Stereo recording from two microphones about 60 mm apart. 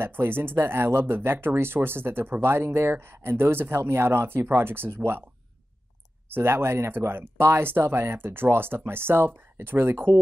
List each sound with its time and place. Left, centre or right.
0.0 s speech: right
6.3 s speech: right